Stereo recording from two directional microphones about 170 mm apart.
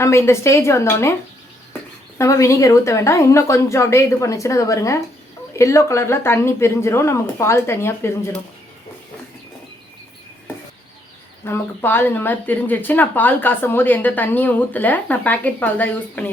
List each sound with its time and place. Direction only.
0.0 s speech: 15° left (ahead or behind)
2.1 s speech: 15° left (ahead or behind)
11.4 s speech: 15° left (ahead or behind)